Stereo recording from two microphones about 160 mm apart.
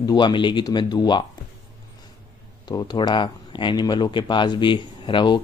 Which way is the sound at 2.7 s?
25° left (ahead or behind).